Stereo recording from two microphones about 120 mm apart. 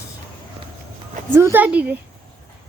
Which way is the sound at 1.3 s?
20° right (ahead or behind).